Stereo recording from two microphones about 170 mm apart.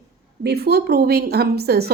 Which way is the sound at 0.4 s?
70° right (ahead or behind).